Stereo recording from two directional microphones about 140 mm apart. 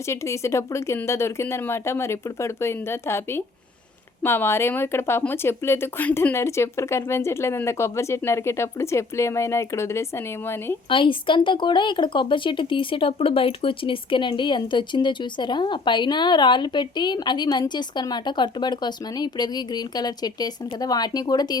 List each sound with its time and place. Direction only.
0.1 s speech: 20° left (ahead or behind)
10.8 s speech: 35° left (ahead or behind)